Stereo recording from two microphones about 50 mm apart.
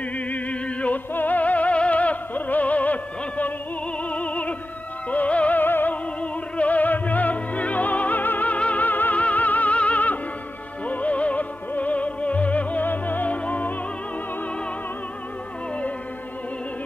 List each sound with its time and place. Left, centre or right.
0.3 s music: left
5.6 s music: left
6.5 s music: left